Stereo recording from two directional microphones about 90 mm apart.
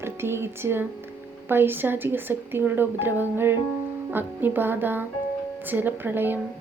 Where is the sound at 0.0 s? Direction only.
25° right (ahead or behind).